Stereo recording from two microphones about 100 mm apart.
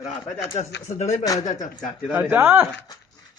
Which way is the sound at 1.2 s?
35° left (ahead or behind).